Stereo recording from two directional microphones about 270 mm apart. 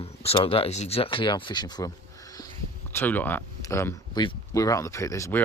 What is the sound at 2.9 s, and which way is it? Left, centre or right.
Speech, centre.